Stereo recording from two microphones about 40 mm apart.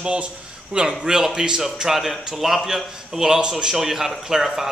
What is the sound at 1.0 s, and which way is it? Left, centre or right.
A man's voice, centre.